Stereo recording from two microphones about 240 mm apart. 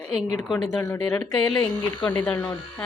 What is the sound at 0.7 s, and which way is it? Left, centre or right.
Speech, centre.